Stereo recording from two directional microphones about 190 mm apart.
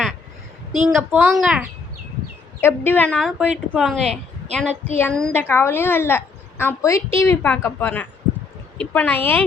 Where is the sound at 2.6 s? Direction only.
10° left (ahead or behind).